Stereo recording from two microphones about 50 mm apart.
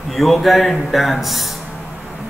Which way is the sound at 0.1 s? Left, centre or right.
Centre.